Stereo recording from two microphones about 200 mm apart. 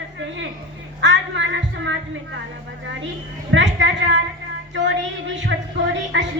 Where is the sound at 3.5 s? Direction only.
65° right (ahead or behind).